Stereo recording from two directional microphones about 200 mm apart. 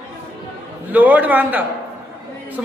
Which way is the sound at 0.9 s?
10° right (ahead or behind).